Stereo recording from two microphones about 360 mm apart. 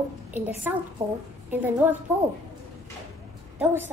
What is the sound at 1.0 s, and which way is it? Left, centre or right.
Speech, centre.